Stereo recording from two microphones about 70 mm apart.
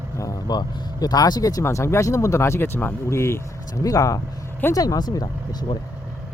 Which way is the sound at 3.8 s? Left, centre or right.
Left.